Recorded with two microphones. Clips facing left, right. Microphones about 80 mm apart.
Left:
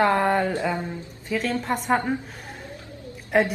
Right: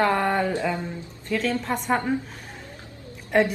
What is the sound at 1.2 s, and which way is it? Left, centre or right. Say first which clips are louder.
Speech: even; centre.